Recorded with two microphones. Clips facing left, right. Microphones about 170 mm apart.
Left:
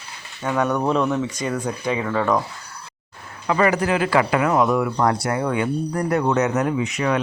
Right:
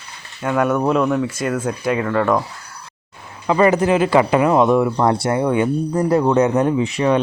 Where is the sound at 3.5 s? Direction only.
25° right (ahead or behind).